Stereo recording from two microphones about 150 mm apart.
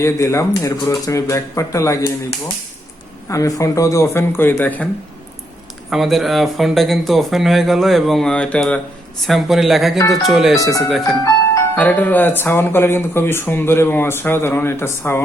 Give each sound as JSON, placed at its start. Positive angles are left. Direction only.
{"t": 0.0, "sound": "speech", "side_deg": 20}
{"t": 3.2, "sound": "speech", "side_deg": 20}
{"t": 5.9, "sound": "speech", "side_deg": 0}